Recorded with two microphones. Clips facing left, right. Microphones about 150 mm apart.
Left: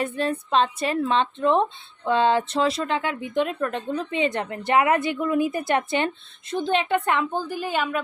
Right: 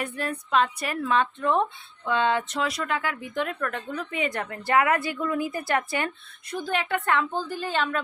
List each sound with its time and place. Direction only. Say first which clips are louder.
0.0 s a woman's voice: left 5 dB; 25° left (ahead or behind); by 8.0 s 10° left (ahead or behind)